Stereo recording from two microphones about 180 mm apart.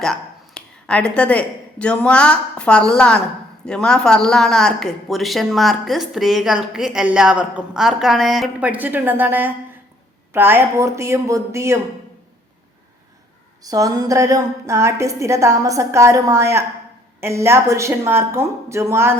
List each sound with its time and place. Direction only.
0.0 s a woman's voice: 5° left (ahead or behind); by 11.8 s 15° right (ahead or behind)
13.6 s a woman's voice: 20° right (ahead or behind)